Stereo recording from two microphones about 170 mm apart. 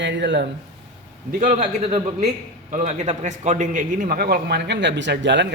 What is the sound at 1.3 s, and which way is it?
A man's voice, 50° right (ahead or behind).